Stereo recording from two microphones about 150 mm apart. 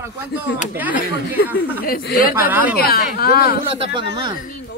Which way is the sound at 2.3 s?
15° right (ahead or behind).